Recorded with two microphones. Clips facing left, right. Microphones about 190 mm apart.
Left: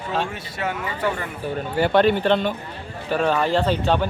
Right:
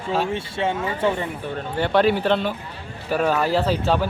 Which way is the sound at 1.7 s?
Centre (ahead or behind).